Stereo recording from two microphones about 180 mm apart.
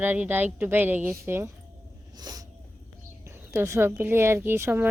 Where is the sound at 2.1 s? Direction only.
20° right (ahead or behind).